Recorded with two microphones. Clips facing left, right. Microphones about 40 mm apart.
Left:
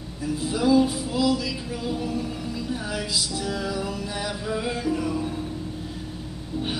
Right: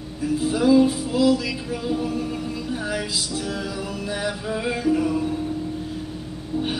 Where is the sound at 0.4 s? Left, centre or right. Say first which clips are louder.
Right 3 dB; centre.